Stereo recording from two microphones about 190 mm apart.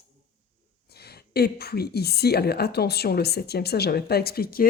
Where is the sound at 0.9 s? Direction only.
55° left (ahead or behind).